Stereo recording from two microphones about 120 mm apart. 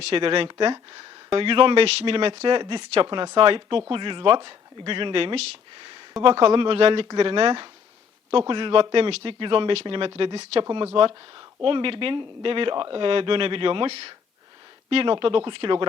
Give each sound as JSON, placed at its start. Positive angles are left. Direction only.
{"t": 0.0, "sound": "speech", "side_deg": -50}
{"t": 5.7, "sound": "a sound", "side_deg": -40}
{"t": 6.2, "sound": "speech", "side_deg": -40}